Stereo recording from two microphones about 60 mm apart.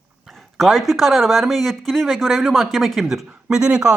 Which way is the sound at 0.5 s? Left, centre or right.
Centre.